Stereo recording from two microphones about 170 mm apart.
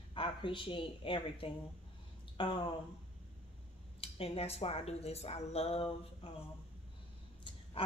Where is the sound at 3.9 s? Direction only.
35° left (ahead or behind).